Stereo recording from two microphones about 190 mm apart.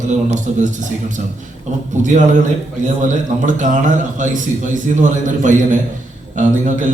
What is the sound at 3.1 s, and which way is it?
Mantra, 40° right (ahead or behind).